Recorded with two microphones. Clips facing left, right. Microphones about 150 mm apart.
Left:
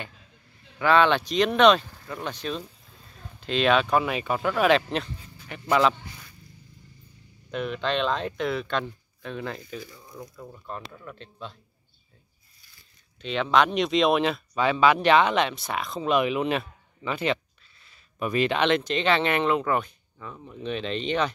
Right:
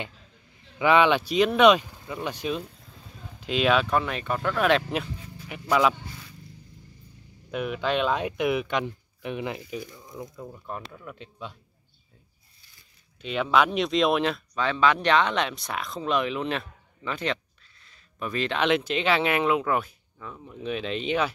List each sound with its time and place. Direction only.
0.7 s speech: 15° right (ahead or behind)
7.5 s speech: 5° right (ahead or behind)
9.8 s speech: centre (ahead or behind)
10.3 s speech: 15° right (ahead or behind)
10.9 s speech: 5° right (ahead or behind)
13.2 s speech: 5° right (ahead or behind); by 18.6 s 10° left (ahead or behind)
18.6 s speech: 5° right (ahead or behind)